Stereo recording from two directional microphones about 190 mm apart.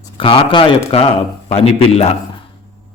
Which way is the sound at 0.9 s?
30° left (ahead or behind).